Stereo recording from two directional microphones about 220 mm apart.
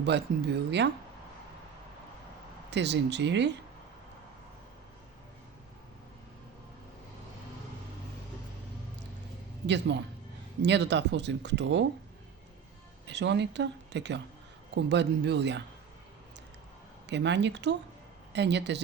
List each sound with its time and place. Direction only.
0.0 s speech: 50° right (ahead or behind)
2.6 s speech: 50° right (ahead or behind)
9.6 s speech: 50° right (ahead or behind)
13.1 s speech: 50° right (ahead or behind)
17.1 s speech: 55° right (ahead or behind)